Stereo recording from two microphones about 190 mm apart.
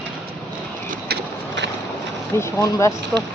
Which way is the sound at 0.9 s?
60° right (ahead or behind).